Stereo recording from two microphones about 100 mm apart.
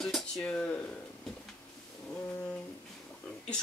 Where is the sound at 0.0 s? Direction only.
5° left (ahead or behind).